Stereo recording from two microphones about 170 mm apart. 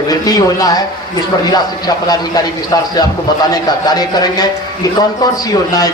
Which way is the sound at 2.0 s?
20° left (ahead or behind).